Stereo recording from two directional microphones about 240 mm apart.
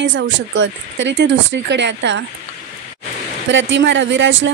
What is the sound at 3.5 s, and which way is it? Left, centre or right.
Speech, right.